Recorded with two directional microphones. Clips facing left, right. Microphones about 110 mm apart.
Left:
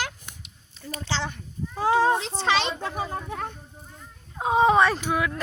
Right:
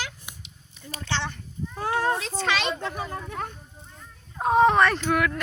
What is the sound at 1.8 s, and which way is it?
Speech, 20° left (ahead or behind).